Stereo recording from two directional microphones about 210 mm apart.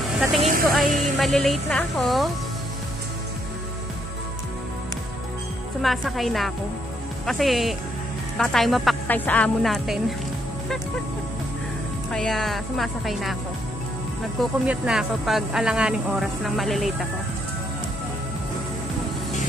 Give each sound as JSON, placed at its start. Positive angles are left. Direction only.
{"t": 0.4, "sound": "music", "side_deg": -35}
{"t": 0.7, "sound": "speech", "side_deg": 0}
{"t": 5.8, "sound": "speech", "side_deg": 0}
{"t": 12.1, "sound": "speech", "side_deg": 0}
{"t": 14.4, "sound": "speech", "side_deg": -5}